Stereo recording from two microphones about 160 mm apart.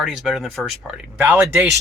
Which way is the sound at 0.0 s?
5° right (ahead or behind).